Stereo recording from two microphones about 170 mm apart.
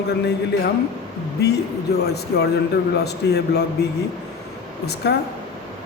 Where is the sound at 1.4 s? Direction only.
75° left (ahead or behind).